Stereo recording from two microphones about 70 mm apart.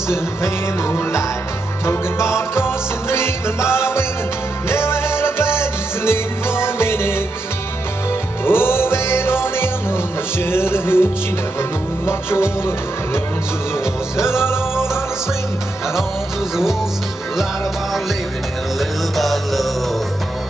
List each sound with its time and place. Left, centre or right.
0.1 s music: left
8.5 s music: left
12.1 s music: left
18.8 s music: centre